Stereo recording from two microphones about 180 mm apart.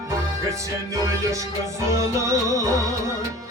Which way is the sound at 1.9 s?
15° right (ahead or behind).